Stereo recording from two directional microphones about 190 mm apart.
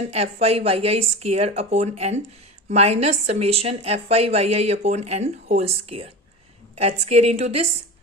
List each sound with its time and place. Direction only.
0.1 s a woman's voice: 35° right (ahead or behind)